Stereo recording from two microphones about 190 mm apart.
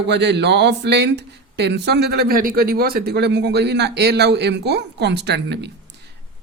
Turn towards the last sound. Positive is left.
turn(degrees=-60)  # may be behind; listen again after turning